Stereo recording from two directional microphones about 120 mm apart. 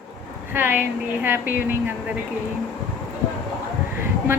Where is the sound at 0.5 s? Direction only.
15° right (ahead or behind).